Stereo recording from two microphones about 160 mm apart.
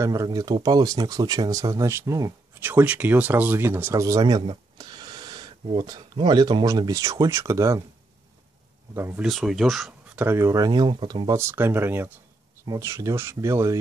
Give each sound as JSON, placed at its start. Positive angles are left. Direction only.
{"t": 0.0, "sound": "speech", "side_deg": -20}
{"t": 8.9, "sound": "speech", "side_deg": -15}
{"t": 9.2, "sound": "speech", "side_deg": 0}
{"t": 10.2, "sound": "speech", "side_deg": -15}